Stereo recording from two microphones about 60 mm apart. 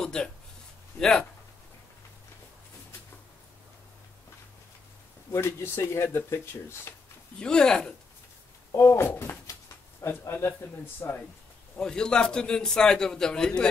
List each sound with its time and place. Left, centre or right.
0.0 s a man's voice: centre
5.6 s speech: left
7.3 s a man's voice: centre
8.7 s speech: left
10.0 s speech: left
11.0 s speech: left
11.7 s a man's voice: centre